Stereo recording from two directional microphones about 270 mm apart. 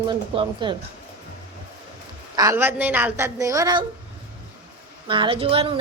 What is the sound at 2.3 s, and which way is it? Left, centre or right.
A woman's voice, centre.